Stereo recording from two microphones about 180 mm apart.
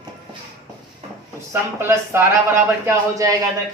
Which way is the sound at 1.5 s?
15° right (ahead or behind).